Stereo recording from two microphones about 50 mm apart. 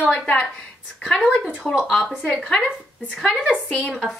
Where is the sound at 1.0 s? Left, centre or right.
Centre.